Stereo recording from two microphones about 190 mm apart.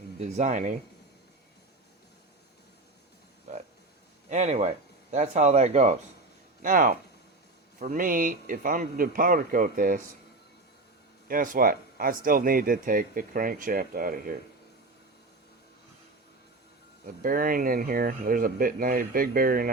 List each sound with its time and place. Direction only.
0.2 s speech: 40° right (ahead or behind)
4.3 s speech: 40° right (ahead or behind)
11.3 s speech: 50° right (ahead or behind)
17.1 s speech: 45° right (ahead or behind)